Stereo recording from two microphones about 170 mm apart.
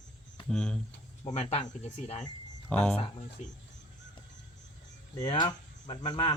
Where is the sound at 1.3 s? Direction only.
35° left (ahead or behind).